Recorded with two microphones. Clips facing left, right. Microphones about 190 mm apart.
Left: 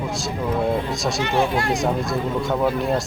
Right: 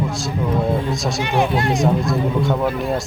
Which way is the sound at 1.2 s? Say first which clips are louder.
Right 2 dB; 15° right (ahead or behind).